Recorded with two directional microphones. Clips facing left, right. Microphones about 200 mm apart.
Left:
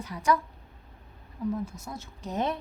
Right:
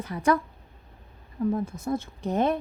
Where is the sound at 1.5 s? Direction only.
55° right (ahead or behind).